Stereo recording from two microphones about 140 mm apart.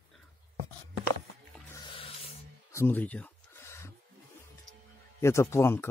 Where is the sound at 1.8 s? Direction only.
40° left (ahead or behind).